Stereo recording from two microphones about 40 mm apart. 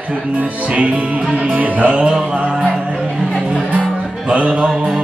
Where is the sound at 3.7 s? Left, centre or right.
Right.